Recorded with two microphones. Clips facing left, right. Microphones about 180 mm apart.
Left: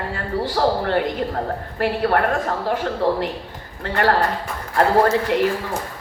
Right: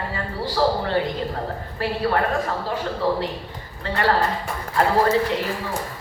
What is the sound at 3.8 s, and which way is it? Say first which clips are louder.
Speech: left 2 dB; 60° left (ahead or behind).